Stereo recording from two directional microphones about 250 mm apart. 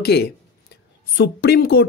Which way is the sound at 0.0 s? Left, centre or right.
Left.